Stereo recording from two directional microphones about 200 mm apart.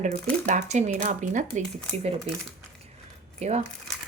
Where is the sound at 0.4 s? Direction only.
35° right (ahead or behind).